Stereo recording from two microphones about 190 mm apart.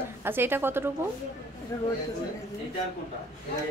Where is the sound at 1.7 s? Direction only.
15° left (ahead or behind).